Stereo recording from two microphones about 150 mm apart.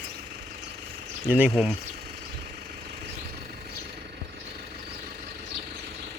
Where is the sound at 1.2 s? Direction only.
10° right (ahead or behind).